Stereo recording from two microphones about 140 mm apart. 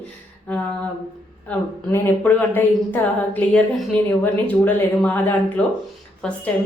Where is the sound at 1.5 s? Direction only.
15° left (ahead or behind).